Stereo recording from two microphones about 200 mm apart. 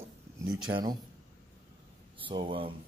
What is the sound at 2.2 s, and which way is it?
Speech, 25° right (ahead or behind).